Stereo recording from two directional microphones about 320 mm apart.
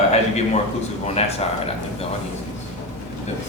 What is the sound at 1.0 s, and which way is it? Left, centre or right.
Speech, centre.